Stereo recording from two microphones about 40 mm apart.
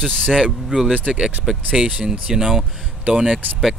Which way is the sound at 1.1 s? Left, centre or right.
Centre.